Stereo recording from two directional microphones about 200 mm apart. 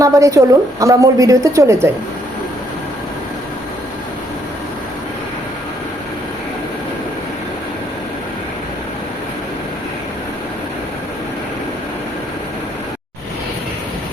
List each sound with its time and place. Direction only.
0.0 s a woman's voice: 15° right (ahead or behind)